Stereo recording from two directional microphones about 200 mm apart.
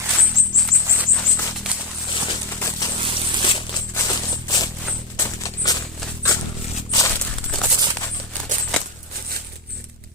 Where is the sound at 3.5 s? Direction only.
20° left (ahead or behind).